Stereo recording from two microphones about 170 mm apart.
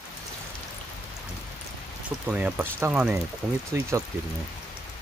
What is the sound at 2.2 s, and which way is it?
Speech, 10° right (ahead or behind).